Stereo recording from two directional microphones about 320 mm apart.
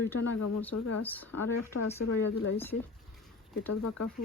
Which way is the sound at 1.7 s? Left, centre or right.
Left.